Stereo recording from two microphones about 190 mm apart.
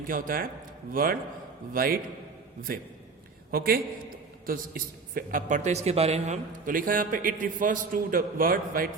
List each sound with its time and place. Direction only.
0.1 s a man's voice: 45° right (ahead or behind)